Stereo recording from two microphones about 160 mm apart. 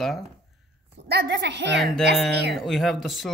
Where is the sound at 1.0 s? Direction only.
90° right.